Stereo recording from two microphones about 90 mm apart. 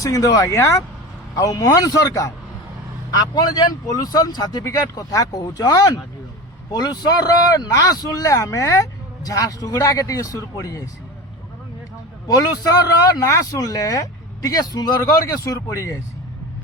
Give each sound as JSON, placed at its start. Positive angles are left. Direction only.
{"t": 0.0, "sound": "speech", "side_deg": 40}
{"t": 12.3, "sound": "speech", "side_deg": 40}